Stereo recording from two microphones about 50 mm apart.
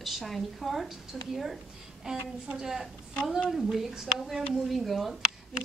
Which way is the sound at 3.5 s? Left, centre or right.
Centre.